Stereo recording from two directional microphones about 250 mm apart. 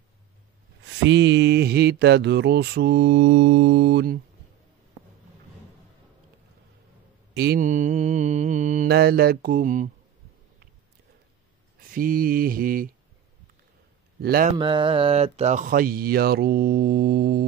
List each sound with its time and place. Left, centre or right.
1.0 s mantra: right
7.3 s speech: right
11.9 s speech: right
14.2 s speech: right
14.6 s speech: centre; by 17.5 s right